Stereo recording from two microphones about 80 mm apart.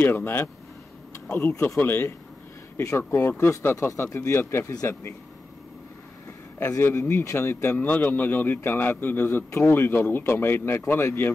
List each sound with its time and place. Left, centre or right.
0.0 s speech: left
1.8 s speech: left
6.6 s speech: left